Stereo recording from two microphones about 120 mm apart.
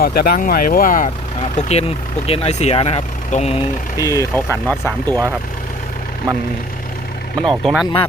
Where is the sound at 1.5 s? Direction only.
65° left (ahead or behind).